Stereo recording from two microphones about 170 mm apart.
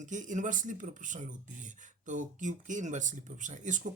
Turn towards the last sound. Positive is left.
turn(degrees=-45)  # may be behind; listen again after turning